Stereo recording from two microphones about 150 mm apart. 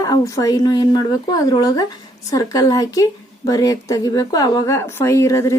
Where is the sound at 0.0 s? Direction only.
25° left (ahead or behind).